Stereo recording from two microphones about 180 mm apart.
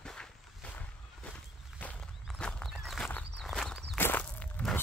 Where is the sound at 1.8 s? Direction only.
5° left (ahead or behind).